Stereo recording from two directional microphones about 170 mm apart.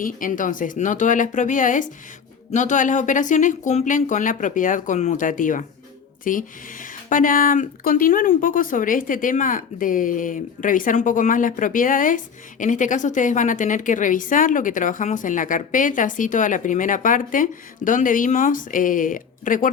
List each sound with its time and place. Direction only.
0.0 s speech: 50° left (ahead or behind)